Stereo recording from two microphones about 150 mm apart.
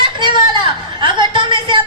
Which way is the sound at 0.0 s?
35° right (ahead or behind).